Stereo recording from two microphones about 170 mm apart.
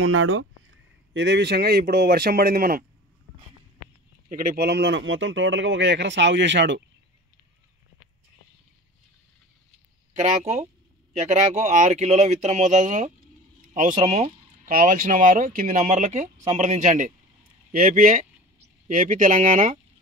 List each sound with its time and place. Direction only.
0.7 s a man's voice: 90° right; by 2.8 s 60° right (ahead or behind)
4.3 s speech: 55° right (ahead or behind); by 6.8 s 90° right
10.1 s speech: 40° right (ahead or behind)